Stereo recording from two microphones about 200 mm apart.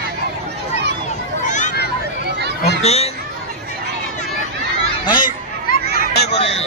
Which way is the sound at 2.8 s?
30° left (ahead or behind).